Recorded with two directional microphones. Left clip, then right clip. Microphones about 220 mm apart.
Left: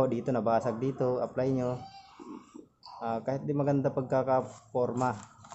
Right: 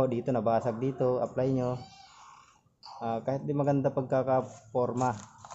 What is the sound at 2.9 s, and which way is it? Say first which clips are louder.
Speech: right 1 dB; 15° right (ahead or behind).